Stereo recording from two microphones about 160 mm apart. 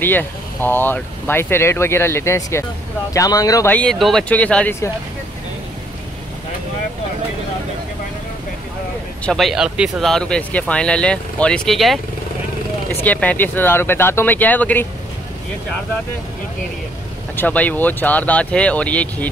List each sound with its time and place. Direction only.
0.0 s speech: 10° left (ahead or behind)
3.7 s speech: 5° left (ahead or behind)
9.2 s speech: centre (ahead or behind)
13.0 s speech: 10° left (ahead or behind)
17.4 s speech: 10° left (ahead or behind)